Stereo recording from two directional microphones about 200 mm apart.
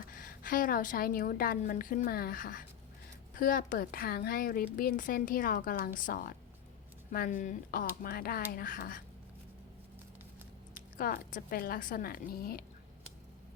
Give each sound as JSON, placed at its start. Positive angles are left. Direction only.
{"t": 0.1, "sound": "speech", "side_deg": 45}
{"t": 10.9, "sound": "speech", "side_deg": 45}